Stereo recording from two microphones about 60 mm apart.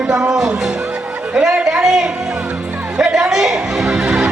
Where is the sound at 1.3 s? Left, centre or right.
Centre.